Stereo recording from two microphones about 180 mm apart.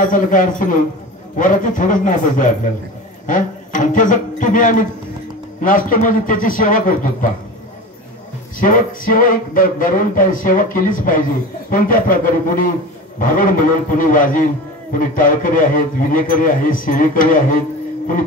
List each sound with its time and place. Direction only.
0.0 s a man's voice: 45° left (ahead or behind)
8.5 s a man's voice: 50° left (ahead or behind)